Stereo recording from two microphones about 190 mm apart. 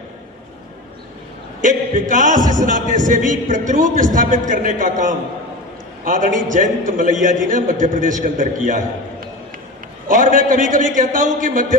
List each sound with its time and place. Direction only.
1.6 s a man's voice: 45° right (ahead or behind)
10.0 s a man's voice: 45° right (ahead or behind)